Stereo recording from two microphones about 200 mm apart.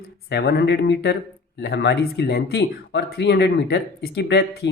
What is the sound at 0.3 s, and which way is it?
Speech, 55° left (ahead or behind).